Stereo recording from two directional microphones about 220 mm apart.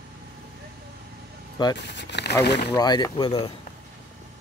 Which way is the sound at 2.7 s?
20° left (ahead or behind).